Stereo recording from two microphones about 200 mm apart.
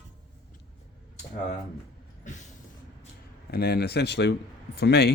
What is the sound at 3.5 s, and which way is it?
Speech, 50° left (ahead or behind).